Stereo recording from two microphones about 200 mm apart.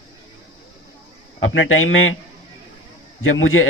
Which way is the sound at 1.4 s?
85° left.